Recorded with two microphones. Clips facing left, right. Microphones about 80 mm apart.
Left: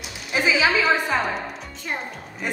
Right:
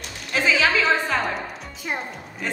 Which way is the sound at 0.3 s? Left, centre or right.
Centre.